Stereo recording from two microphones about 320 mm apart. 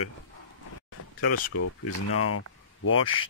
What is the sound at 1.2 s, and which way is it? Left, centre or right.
Speech, left.